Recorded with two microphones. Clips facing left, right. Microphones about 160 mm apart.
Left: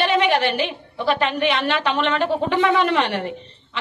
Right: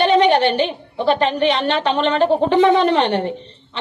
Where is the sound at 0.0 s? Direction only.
35° right (ahead or behind).